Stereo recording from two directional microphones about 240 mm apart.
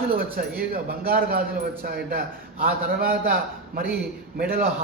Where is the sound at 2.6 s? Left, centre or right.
Right.